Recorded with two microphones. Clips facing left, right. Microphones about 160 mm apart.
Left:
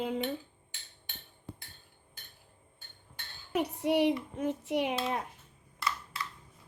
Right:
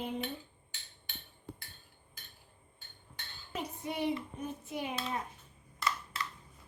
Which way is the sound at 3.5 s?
70° left (ahead or behind).